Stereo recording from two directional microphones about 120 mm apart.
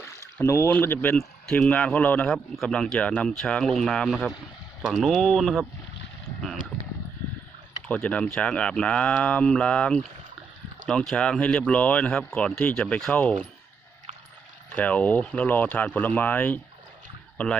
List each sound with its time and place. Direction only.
0.0 s a sound: 20° left (ahead or behind)
0.7 s a man's voice: 15° left (ahead or behind)
7.9 s speech: 10° left (ahead or behind)
14.8 s speech: 10° left (ahead or behind)